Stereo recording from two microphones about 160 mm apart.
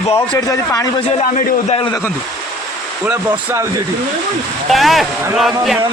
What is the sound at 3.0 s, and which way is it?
Speech, 10° right (ahead or behind).